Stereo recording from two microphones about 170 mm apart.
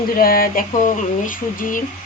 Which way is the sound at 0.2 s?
60° left (ahead or behind).